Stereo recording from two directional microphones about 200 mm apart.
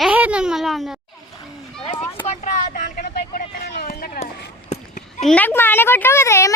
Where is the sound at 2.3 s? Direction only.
35° left (ahead or behind).